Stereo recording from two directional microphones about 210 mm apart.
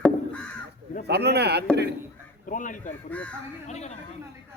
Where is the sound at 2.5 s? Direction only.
40° left (ahead or behind).